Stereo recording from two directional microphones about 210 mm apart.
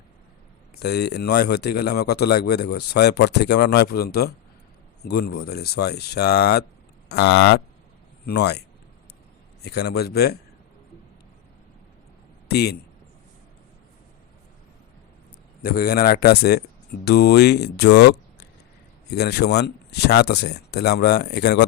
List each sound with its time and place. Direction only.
0.8 s speech: 50° left (ahead or behind)
9.6 s speech: 50° left (ahead or behind)
12.5 s speech: 50° left (ahead or behind)
15.6 s speech: 45° left (ahead or behind)